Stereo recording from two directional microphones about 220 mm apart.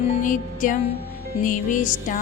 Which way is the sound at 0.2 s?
35° left (ahead or behind).